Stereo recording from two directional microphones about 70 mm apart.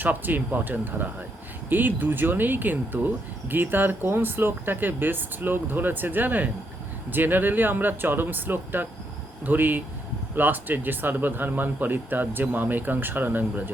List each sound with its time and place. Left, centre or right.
0.0 s a man's voice: right